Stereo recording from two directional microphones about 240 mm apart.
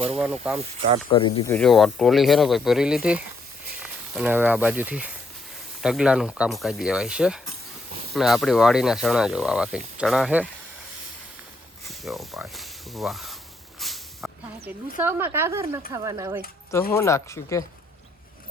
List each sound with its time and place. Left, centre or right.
0.2 s speech: centre
1.1 s speech: centre
1.5 s speech: centre
11.9 s speech: centre
13.7 s a sound: centre
15.0 s speech: centre
16.9 s speech: centre